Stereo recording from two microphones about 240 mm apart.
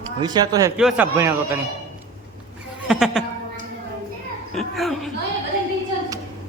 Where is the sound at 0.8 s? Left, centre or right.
Centre.